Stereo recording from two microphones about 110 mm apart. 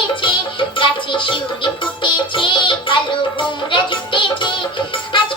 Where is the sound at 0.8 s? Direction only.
50° left (ahead or behind).